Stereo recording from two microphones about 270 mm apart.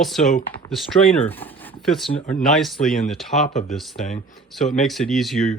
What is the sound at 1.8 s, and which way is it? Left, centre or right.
Speech, centre.